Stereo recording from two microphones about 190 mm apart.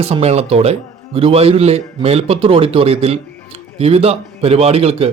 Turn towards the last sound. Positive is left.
turn(degrees=-30)  # may be behind; listen again after turning